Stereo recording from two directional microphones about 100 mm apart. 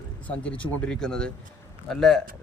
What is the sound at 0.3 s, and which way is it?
Speech, 15° left (ahead or behind).